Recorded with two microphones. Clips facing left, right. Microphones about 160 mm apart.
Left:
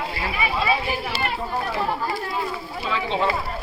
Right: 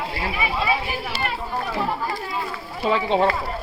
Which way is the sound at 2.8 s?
45° right (ahead or behind).